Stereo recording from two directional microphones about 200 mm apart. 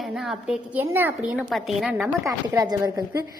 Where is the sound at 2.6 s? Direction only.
20° right (ahead or behind).